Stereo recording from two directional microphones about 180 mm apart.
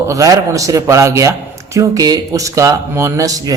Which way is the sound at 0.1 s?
20° right (ahead or behind).